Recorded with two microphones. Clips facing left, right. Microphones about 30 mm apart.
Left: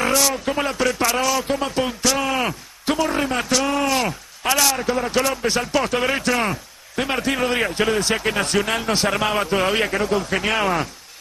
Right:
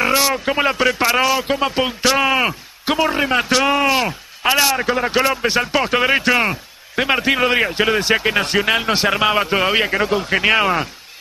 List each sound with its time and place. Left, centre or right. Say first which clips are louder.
0.1 s speech: right 3 dB; right